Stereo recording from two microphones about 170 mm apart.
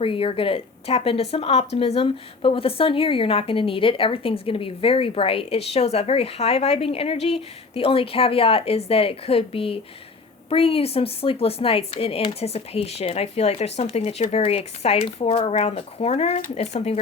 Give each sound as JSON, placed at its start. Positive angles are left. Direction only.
{"t": 0.0, "sound": "speech", "side_deg": 35}